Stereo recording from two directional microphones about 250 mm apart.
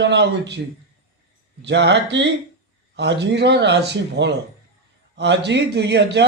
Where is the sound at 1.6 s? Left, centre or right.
Right.